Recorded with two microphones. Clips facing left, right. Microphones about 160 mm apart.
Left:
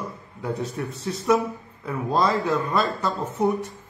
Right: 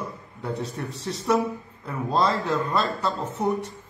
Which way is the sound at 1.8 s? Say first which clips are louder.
Left 1 dB; 10° left (ahead or behind).